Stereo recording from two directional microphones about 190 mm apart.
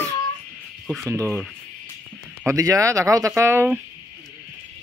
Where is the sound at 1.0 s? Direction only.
15° right (ahead or behind).